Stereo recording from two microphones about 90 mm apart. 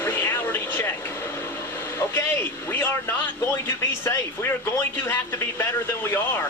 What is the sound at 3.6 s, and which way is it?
Speech, 25° left (ahead or behind).